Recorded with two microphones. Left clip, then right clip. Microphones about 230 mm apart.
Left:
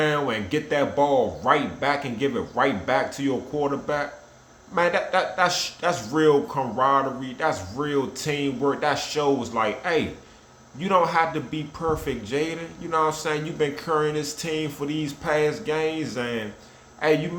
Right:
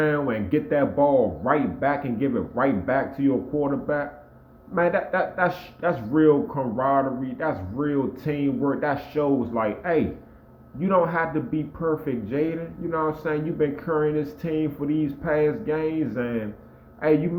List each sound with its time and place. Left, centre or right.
0.0 s a man's voice: centre